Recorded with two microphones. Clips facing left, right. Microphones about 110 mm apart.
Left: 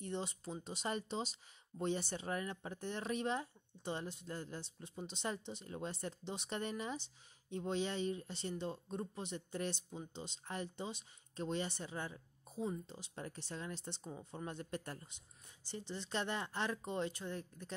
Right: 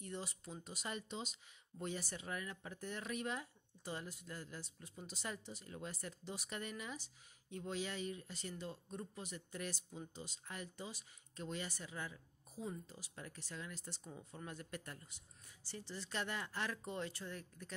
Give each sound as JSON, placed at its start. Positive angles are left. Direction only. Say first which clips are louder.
{"t": 0.0, "sound": "speech", "louder": "left 5 dB", "side_deg": 25}
{"t": 15.0, "sound": "speech", "louder": "left 1 dB", "side_deg": 20}